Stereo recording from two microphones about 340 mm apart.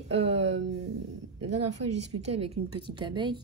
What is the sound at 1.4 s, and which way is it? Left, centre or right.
Speech, right.